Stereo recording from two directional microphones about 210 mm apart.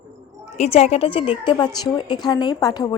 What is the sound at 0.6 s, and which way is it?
A woman's voice, 30° left (ahead or behind).